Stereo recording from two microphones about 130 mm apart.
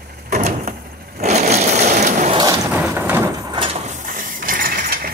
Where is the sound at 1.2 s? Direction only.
60° right (ahead or behind).